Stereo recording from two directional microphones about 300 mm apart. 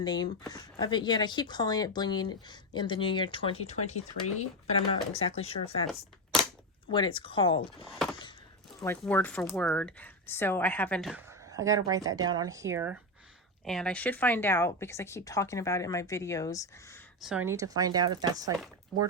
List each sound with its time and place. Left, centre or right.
0.0 s speech: centre
6.8 s speech: centre
17.2 s speech: centre
18.9 s speech: centre